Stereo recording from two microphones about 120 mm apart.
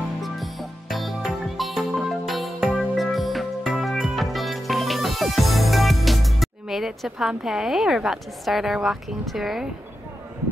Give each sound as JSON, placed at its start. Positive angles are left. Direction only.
{"t": 0.2, "sound": "music", "side_deg": 0}